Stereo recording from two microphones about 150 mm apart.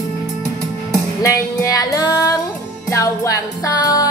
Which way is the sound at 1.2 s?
25° left (ahead or behind).